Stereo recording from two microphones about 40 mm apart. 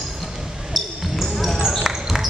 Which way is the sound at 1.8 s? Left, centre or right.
Centre.